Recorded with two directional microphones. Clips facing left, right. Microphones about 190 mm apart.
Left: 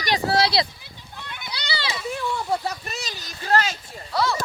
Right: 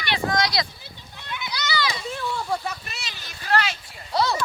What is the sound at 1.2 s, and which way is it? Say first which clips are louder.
Children playing: right 3 dB; 50° left (ahead or behind).